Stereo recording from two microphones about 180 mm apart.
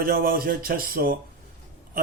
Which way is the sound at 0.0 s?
55° right (ahead or behind).